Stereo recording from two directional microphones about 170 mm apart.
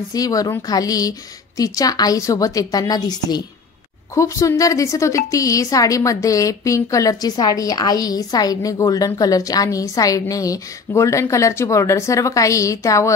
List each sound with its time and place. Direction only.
0.1 s a woman's voice: 20° left (ahead or behind)